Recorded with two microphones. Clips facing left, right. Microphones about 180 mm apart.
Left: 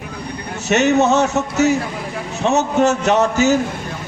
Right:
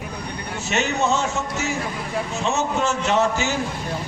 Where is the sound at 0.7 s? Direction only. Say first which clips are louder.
Left 8 dB; 70° left (ahead or behind).